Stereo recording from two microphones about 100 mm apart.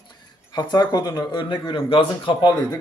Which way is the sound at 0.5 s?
45° left (ahead or behind).